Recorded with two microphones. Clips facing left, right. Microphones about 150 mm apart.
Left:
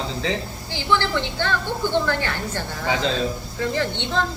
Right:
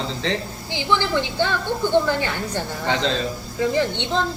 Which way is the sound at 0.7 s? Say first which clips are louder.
Right 1 dB; 15° right (ahead or behind).